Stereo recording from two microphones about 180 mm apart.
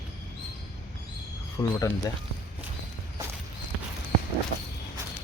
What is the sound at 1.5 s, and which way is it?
Speech, 20° left (ahead or behind).